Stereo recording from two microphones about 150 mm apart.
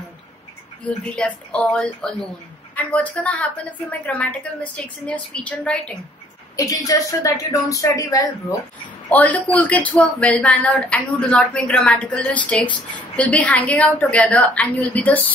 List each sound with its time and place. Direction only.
0.8 s speech: 10° left (ahead or behind)
6.6 s a woman's voice: 25° left (ahead or behind)
9.1 s speech: 10° left (ahead or behind)